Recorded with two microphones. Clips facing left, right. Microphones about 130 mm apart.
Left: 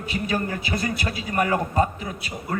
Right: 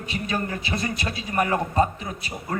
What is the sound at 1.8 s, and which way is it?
Speech, 30° right (ahead or behind).